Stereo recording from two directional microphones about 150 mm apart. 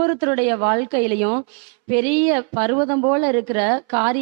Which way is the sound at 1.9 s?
10° right (ahead or behind).